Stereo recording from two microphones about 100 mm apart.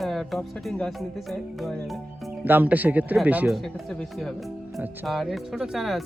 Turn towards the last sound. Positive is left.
turn(degrees=0)  # may be behind; listen again after turning